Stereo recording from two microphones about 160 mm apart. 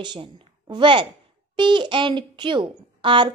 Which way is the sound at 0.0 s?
30° right (ahead or behind).